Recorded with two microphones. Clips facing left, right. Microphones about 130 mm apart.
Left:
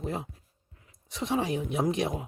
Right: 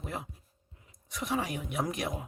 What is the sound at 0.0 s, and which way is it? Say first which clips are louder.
Speech: left 5 dB; 25° left (ahead or behind).